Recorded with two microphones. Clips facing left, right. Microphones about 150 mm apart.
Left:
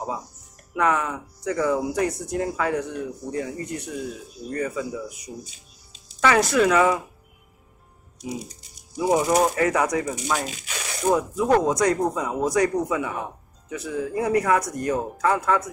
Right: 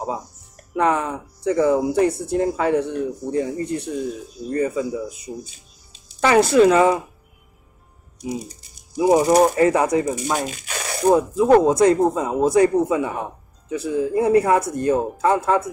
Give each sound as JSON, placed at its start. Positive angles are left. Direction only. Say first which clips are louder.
{"t": 0.7, "sound": "speech", "louder": "right 3 dB", "side_deg": -30}
{"t": 9.1, "sound": "speech", "louder": "right 5 dB", "side_deg": -35}
{"t": 10.2, "sound": "speech", "louder": "right 3 dB", "side_deg": -45}
{"t": 11.0, "sound": "speech", "louder": "right 5 dB", "side_deg": -30}